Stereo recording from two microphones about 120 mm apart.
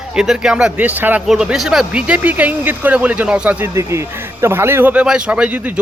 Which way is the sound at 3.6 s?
25° right (ahead or behind).